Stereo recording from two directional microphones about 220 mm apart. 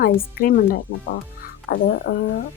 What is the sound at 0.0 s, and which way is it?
Speech, 40° left (ahead or behind).